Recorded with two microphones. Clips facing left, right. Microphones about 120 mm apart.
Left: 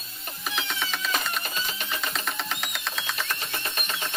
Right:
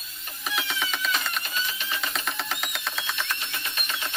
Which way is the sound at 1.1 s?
40° left (ahead or behind).